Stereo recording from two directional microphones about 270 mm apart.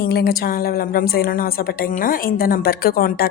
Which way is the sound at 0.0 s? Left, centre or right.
Left.